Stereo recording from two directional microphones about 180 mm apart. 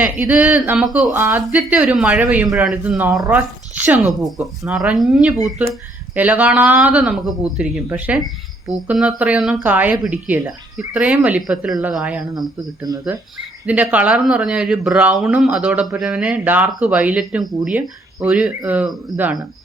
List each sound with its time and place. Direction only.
0.0 s speech: 5° right (ahead or behind)
12.3 s speech: 20° right (ahead or behind)
13.7 s speech: 10° right (ahead or behind)